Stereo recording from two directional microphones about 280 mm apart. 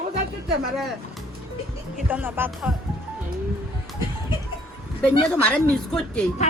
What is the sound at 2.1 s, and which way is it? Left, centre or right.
Speech, centre.